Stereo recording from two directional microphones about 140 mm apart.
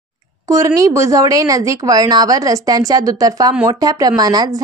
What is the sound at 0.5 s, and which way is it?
A woman's voice, 25° right (ahead or behind).